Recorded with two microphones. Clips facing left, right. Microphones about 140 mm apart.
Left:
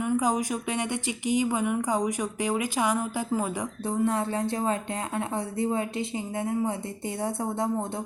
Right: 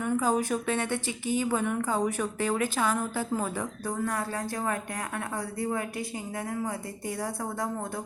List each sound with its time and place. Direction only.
0.0 s speech: 15° left (ahead or behind)
3.8 s a woman's voice: 25° left (ahead or behind)